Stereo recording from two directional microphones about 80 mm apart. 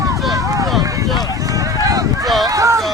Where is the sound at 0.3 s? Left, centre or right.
Right.